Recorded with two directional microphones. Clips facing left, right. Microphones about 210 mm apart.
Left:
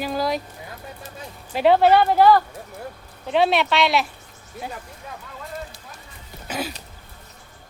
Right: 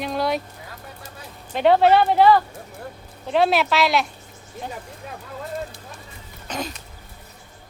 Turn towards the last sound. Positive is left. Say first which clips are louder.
# left 1 dB
turn(degrees=5)  # may be behind; listen again after turning